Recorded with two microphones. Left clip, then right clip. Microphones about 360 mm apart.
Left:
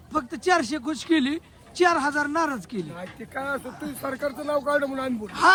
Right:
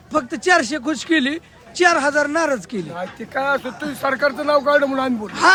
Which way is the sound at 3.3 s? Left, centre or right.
Right.